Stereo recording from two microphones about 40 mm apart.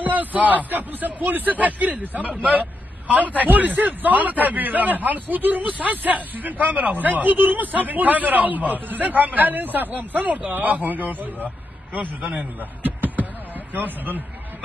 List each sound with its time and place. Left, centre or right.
0.0 s a man's voice: right